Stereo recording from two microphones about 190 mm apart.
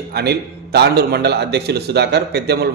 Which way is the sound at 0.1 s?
60° right (ahead or behind).